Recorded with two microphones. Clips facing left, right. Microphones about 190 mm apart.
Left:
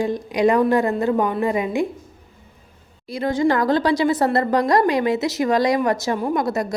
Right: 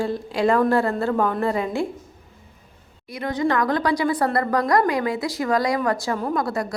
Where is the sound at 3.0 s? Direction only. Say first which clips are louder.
Left 4 dB; 30° left (ahead or behind).